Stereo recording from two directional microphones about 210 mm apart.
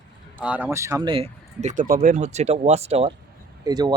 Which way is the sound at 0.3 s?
5° right (ahead or behind).